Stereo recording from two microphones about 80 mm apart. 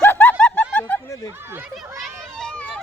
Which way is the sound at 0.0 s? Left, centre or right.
Left.